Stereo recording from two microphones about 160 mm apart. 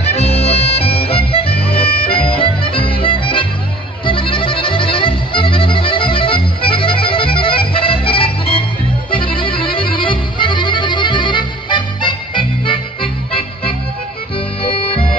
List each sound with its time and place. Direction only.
0.0 s music: 40° left (ahead or behind)